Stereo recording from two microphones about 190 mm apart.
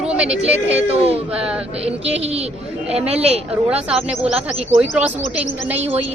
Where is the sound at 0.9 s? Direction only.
30° right (ahead or behind).